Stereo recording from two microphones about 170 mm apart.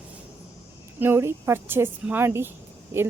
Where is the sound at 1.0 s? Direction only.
15° right (ahead or behind).